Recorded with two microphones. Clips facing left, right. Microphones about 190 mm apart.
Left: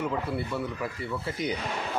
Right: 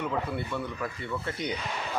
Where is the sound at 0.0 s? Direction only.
5° left (ahead or behind).